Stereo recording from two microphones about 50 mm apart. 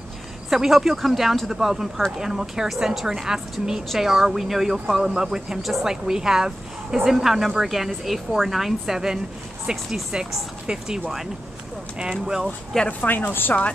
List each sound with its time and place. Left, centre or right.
0.5 s a woman's voice: centre
12.7 s speech: centre
13.3 s speech: left